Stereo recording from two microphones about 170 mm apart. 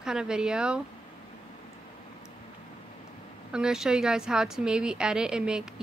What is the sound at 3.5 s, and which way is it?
Speech, 5° right (ahead or behind).